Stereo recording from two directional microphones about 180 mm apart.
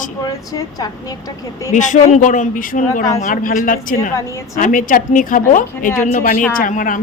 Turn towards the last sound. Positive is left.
turn(degrees=50)  # may be behind; listen again after turning